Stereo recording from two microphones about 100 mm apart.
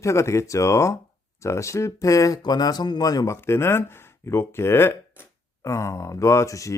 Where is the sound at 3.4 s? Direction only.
25° left (ahead or behind).